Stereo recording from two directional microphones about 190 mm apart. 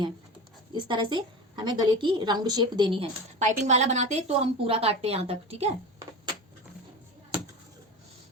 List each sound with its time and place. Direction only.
0.7 s a woman's voice: 25° right (ahead or behind)